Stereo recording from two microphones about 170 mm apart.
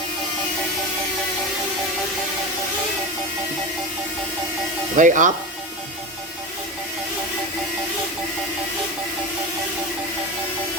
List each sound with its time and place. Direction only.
4.9 s speech: 50° right (ahead or behind)